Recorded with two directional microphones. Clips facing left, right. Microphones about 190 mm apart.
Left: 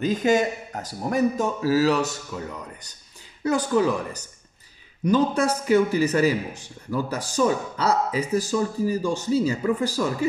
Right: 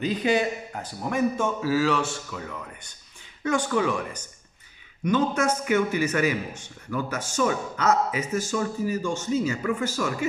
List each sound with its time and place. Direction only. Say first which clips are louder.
0.0 s a man's voice: left 3 dB; 45° left (ahead or behind)